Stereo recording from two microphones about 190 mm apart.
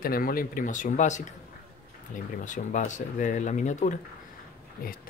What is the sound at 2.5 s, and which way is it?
Speech, 40° left (ahead or behind).